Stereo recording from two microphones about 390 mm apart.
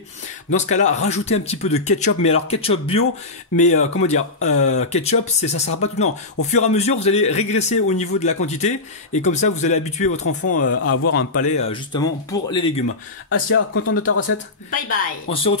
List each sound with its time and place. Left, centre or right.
0.6 s a man's voice: centre
3.6 s speech: left
4.7 s a man's voice: centre
10.4 s speech: left
11.3 s a man's voice: centre
13.3 s speech: left
14.7 s a man's voice: centre